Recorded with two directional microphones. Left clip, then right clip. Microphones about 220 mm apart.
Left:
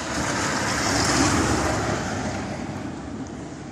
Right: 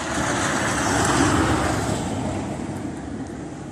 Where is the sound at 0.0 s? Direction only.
25° left (ahead or behind); by 2.0 s 40° left (ahead or behind).